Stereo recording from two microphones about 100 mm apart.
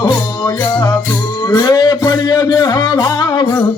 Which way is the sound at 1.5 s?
40° left (ahead or behind).